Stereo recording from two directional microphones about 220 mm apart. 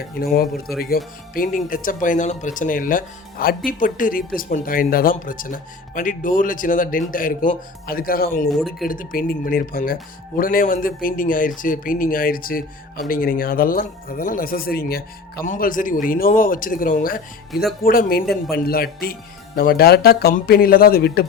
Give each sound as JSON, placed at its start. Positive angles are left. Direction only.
{"t": 0.0, "sound": "speech", "side_deg": 45}
{"t": 8.4, "sound": "speech", "side_deg": 0}
{"t": 8.8, "sound": "speech", "side_deg": 40}